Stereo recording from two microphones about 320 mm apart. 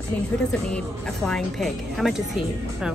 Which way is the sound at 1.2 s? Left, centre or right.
Centre.